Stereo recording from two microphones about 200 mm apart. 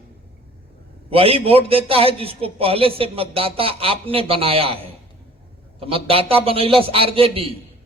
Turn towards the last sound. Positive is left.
turn(degrees=-25)  # may be behind; listen again after turning